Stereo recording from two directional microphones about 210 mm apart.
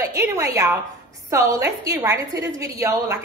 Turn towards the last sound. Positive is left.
turn(degrees=-15)  # may be behind; listen again after turning